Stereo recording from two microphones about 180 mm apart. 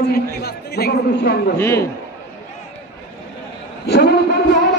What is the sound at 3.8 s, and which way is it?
Speech, 70° left (ahead or behind).